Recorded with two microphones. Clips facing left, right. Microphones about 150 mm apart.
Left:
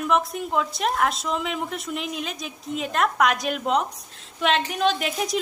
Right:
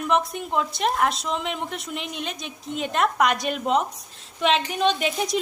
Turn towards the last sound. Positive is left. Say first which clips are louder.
# right 1 dB
turn(degrees=0)  # may be behind; listen again after turning